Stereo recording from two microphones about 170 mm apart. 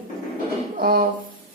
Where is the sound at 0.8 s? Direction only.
60° right (ahead or behind).